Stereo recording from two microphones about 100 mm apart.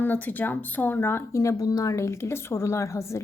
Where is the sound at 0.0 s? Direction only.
20° left (ahead or behind).